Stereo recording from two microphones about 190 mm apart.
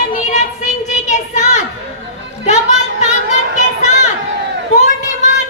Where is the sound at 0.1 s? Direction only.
40° left (ahead or behind).